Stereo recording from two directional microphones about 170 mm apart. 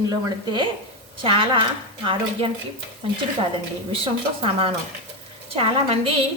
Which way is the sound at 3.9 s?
35° right (ahead or behind).